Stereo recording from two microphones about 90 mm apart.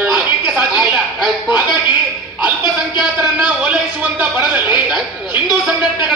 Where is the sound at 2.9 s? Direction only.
15° right (ahead or behind).